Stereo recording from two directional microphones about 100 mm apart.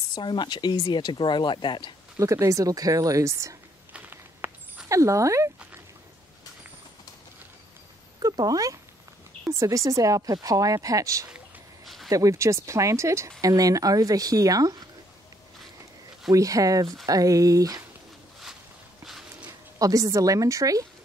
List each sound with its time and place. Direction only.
0.1 s speech: 55° left (ahead or behind)
2.1 s speech: 30° right (ahead or behind)
3.9 s a sound: 20° right (ahead or behind)
4.8 s speech: 30° right (ahead or behind)
8.2 s speech: 40° right (ahead or behind)
11.8 s a sound: centre (ahead or behind)
12.1 s speech: 35° right (ahead or behind)
16.3 s speech: 35° right (ahead or behind)
19.8 s speech: 35° right (ahead or behind)